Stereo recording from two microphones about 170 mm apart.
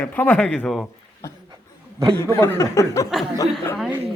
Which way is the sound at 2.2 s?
15° left (ahead or behind).